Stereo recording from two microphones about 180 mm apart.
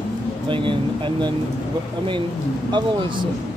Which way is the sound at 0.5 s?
25° right (ahead or behind).